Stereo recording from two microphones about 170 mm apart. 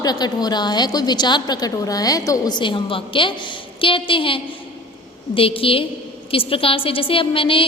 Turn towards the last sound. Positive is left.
turn(degrees=30)  # may be behind; listen again after turning